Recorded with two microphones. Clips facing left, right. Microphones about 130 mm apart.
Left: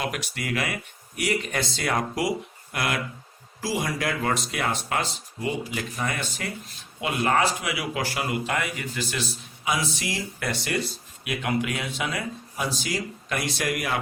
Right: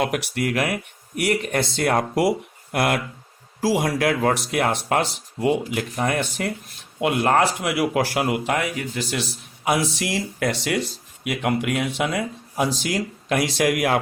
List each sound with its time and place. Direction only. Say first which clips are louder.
0.0 s speech: right 7 dB; 60° right (ahead or behind)